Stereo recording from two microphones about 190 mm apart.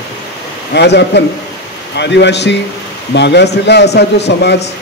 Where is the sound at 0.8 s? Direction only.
65° left (ahead or behind).